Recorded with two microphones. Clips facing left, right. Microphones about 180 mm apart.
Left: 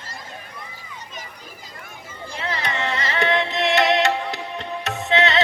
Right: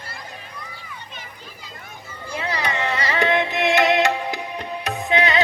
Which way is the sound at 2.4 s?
20° right (ahead or behind).